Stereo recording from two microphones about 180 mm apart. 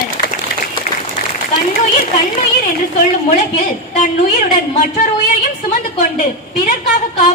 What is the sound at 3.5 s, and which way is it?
A woman's voice, 45° left (ahead or behind).